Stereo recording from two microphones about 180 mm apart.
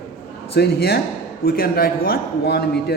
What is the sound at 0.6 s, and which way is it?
A man's voice, 60° left (ahead or behind).